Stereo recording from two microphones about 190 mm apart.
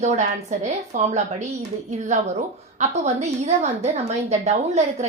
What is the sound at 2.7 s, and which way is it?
A woman's voice, 35° right (ahead or behind).